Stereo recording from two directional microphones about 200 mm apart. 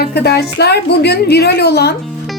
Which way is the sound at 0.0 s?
55° left (ahead or behind).